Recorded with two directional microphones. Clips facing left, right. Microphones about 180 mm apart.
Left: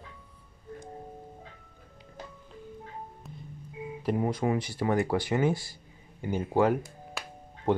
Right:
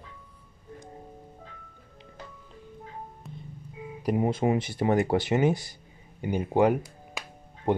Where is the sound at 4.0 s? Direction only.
15° right (ahead or behind).